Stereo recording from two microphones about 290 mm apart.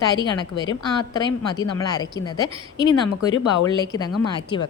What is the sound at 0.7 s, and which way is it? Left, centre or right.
A woman's voice, centre.